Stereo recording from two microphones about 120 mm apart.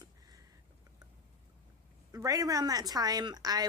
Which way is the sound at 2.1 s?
30° right (ahead or behind).